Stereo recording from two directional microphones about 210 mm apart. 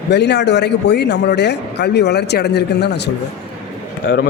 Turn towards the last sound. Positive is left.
turn(degrees=55)  # may be behind; listen again after turning